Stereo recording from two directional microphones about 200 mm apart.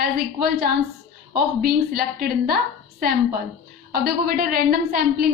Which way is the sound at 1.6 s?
50° right (ahead or behind).